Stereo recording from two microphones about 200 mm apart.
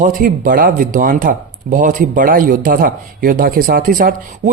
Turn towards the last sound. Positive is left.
turn(degrees=-45)  # may be behind; listen again after turning